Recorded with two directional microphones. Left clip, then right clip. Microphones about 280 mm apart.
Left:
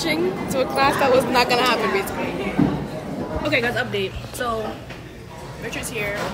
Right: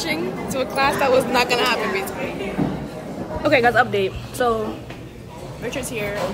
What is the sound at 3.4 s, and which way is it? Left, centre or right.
Speech, centre.